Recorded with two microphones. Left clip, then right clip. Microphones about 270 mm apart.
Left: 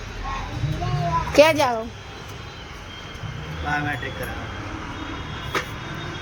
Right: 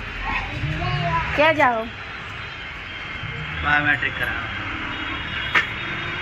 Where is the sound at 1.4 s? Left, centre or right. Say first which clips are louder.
Left 2 dB; left.